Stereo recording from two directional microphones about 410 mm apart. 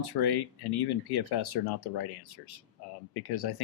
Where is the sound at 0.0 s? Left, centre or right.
Left.